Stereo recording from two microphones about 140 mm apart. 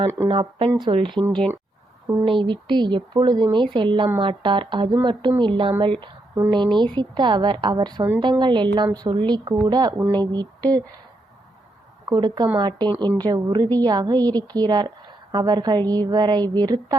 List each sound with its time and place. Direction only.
0.3 s speech: 40° right (ahead or behind)
1.3 s speech: 5° left (ahead or behind)
2.2 s a woman's voice: 35° right (ahead or behind)
12.0 s a woman's voice: 30° right (ahead or behind)